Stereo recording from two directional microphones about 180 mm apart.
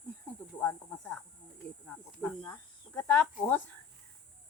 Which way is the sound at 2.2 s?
10° left (ahead or behind).